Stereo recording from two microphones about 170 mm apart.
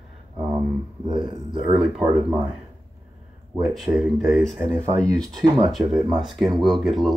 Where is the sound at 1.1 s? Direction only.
25° right (ahead or behind).